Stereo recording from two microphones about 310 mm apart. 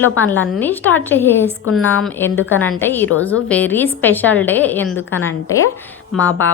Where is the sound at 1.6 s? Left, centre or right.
Left.